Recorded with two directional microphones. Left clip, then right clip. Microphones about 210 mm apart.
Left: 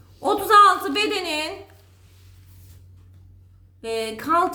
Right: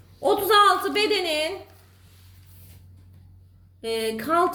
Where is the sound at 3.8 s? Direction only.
30° left (ahead or behind).